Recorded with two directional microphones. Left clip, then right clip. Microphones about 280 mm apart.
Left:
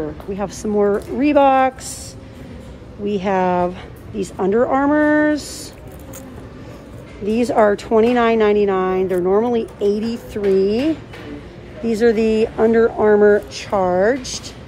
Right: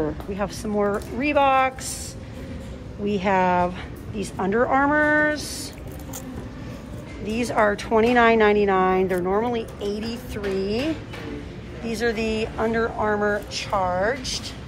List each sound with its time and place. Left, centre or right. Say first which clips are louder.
0.0 s a woman's voice: left 2 dB; centre
3.1 s a woman's voice: left 3 dB; centre
7.2 s a woman's voice: left 6 dB; centre